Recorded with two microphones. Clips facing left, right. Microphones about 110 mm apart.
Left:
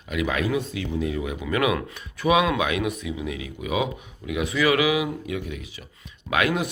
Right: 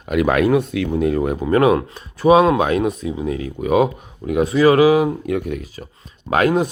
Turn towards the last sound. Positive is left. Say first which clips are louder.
# right 7 dB
turn(degrees=-35)  # may be behind; listen again after turning